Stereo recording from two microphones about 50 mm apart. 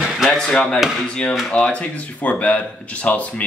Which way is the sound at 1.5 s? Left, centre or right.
Left.